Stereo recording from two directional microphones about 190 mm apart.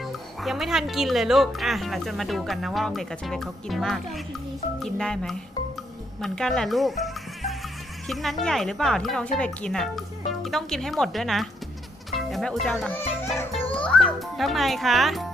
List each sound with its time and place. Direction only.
0.0 s a child's voice: centre (ahead or behind)